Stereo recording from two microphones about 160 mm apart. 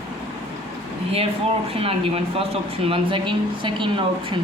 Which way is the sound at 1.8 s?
35° right (ahead or behind).